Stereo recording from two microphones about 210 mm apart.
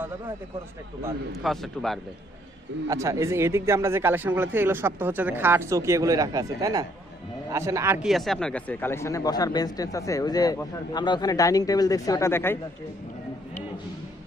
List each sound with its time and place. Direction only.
1.3 s a man's voice: centre (ahead or behind)
2.9 s speech: 15° right (ahead or behind); by 12.5 s 10° left (ahead or behind)